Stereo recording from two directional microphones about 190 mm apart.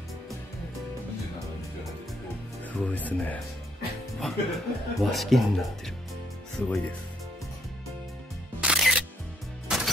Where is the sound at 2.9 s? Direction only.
10° left (ahead or behind).